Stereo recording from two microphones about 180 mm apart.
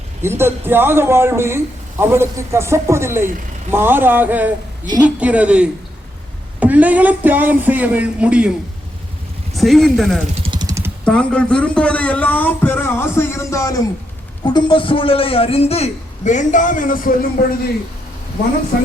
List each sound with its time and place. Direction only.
0.2 s a man's voice: 15° right (ahead or behind)
9.6 s speech: centre (ahead or behind)
10.4 s a sound: 25° right (ahead or behind)
11.0 s a man's voice: 5° left (ahead or behind); by 17.2 s 50° left (ahead or behind)